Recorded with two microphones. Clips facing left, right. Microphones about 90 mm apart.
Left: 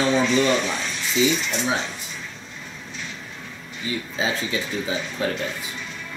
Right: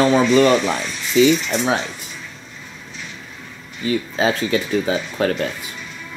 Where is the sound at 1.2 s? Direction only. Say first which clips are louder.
Right 7 dB; 70° right (ahead or behind).